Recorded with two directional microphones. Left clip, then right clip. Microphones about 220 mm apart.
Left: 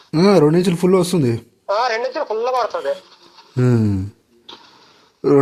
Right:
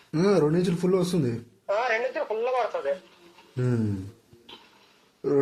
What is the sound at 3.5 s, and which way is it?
Speech, 45° left (ahead or behind).